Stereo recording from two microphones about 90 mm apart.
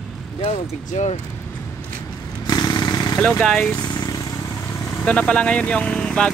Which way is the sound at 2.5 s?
45° left (ahead or behind).